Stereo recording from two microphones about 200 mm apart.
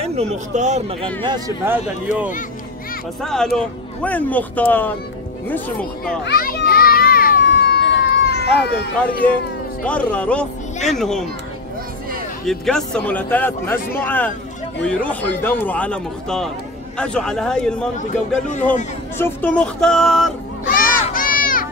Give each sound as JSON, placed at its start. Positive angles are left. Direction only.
{"t": 0.0, "sound": "speech", "side_deg": -30}
{"t": 1.2, "sound": "speech", "side_deg": -20}
{"t": 1.7, "sound": "speech", "side_deg": -10}
{"t": 3.2, "sound": "speech", "side_deg": 0}
{"t": 6.0, "sound": "children playing", "side_deg": 50}
{"t": 9.0, "sound": "a woman's voice", "side_deg": 5}
{"t": 12.4, "sound": "a woman's voice", "side_deg": 0}
{"t": 17.9, "sound": "speech", "side_deg": 40}
{"t": 19.1, "sound": "a woman's voice", "side_deg": 10}
{"t": 20.6, "sound": "a sound", "side_deg": 45}